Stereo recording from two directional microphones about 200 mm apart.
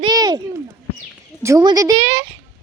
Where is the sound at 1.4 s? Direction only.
15° right (ahead or behind).